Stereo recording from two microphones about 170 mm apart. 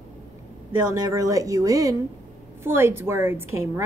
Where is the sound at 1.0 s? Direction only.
20° right (ahead or behind).